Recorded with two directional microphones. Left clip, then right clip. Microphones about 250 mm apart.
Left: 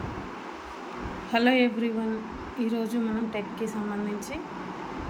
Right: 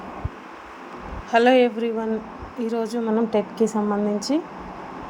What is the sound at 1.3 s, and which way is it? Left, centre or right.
A man's voice, centre.